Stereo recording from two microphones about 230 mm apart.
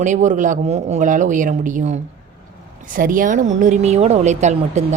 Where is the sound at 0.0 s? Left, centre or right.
Right.